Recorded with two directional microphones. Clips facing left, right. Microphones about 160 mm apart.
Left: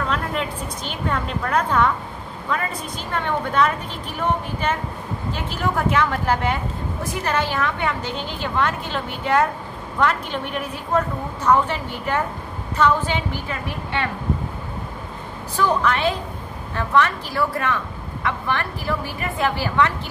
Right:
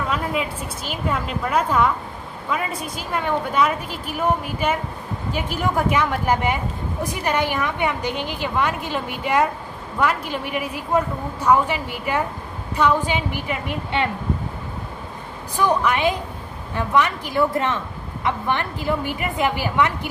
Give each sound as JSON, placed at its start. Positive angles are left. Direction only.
{"t": 0.1, "sound": "speech", "side_deg": -5}
{"t": 15.5, "sound": "a woman's voice", "side_deg": -15}